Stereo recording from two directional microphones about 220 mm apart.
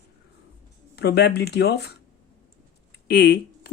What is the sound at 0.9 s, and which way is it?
Speech, 50° left (ahead or behind).